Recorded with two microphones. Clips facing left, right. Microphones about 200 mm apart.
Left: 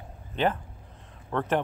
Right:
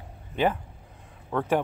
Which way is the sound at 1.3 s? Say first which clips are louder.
Right 2 dB; 5° right (ahead or behind).